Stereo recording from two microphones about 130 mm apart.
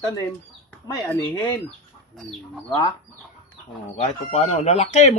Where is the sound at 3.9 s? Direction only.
55° left (ahead or behind).